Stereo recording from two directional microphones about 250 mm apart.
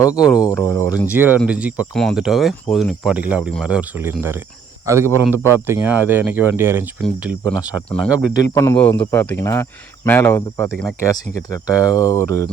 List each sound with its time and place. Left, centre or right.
0.0 s speech: centre
1.1 s a man's voice: centre
11.9 s speech: centre